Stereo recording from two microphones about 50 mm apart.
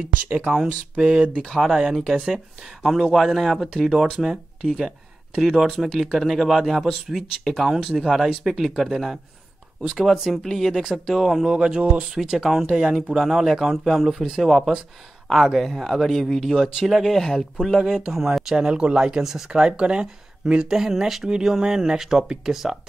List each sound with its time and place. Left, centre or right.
0.1 s speech: right
1.5 s speech: centre
10.3 s speech: centre
10.7 s speech: centre
11.4 s speech: centre
12.2 s speech: centre
17.8 s speech: centre
19.6 s speech: centre
21.0 s speech: centre